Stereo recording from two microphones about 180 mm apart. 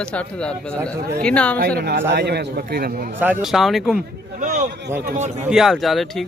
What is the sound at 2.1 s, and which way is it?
Speech, 70° right (ahead or behind).